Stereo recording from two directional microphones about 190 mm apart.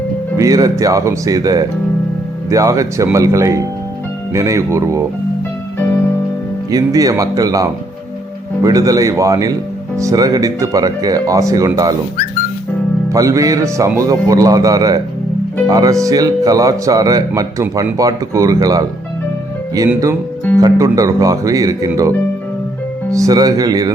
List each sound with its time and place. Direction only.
0.3 s speech: 20° right (ahead or behind)
6.7 s speech: 20° right (ahead or behind)
13.1 s speech: 15° right (ahead or behind)
23.1 s speech: 20° right (ahead or behind)